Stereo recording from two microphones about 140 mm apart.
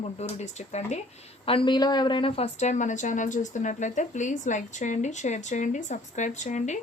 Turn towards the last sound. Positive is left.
turn(degrees=60)  # may be behind; listen again after turning